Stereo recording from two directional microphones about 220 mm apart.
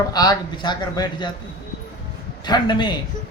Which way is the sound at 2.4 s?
20° left (ahead or behind).